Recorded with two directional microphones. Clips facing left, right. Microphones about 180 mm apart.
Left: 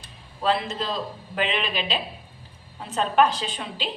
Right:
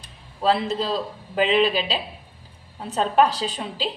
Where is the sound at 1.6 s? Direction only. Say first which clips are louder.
Right 5 dB; 35° right (ahead or behind).